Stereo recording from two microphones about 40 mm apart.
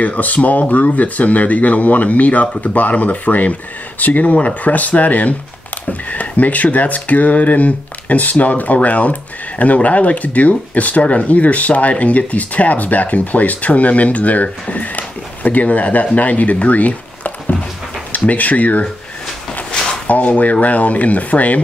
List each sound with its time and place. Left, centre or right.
0.0 s speech: left
20.1 s speech: left